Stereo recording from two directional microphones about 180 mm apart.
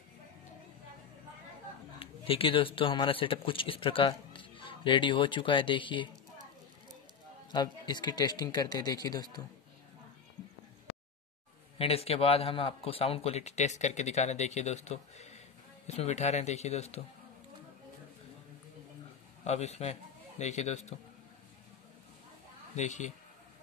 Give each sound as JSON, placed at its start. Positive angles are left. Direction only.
{"t": 2.0, "sound": "speech", "side_deg": 30}
{"t": 7.5, "sound": "speech", "side_deg": 25}
{"t": 11.8, "sound": "speech", "side_deg": 35}
{"t": 19.4, "sound": "a man's voice", "side_deg": 35}
{"t": 22.8, "sound": "speech", "side_deg": 40}